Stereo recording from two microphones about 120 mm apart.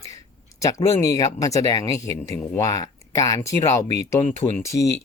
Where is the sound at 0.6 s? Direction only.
25° left (ahead or behind).